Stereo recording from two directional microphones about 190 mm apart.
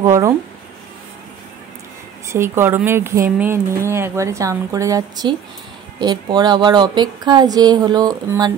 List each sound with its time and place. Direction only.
0.0 s speech: 15° right (ahead or behind)
2.2 s a woman's voice: 15° right (ahead or behind)